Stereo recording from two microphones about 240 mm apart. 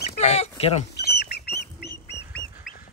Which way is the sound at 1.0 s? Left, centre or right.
Left.